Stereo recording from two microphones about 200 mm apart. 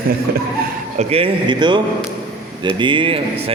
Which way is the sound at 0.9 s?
30° right (ahead or behind).